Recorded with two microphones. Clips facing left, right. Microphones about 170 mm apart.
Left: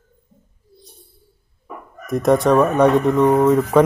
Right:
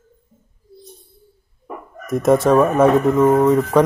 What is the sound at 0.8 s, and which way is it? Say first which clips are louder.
Bird: right 6 dB; 30° left (ahead or behind).